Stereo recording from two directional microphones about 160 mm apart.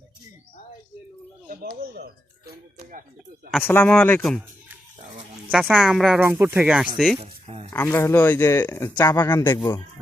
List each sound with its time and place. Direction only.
1.5 s speech: 65° right (ahead or behind)
3.6 s speech: 10° left (ahead or behind)
5.5 s speech: centre (ahead or behind)
7.2 s a sound: 40° right (ahead or behind)
7.7 s speech: 15° left (ahead or behind)